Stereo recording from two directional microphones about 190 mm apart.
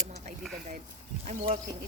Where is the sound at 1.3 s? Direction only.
45° right (ahead or behind).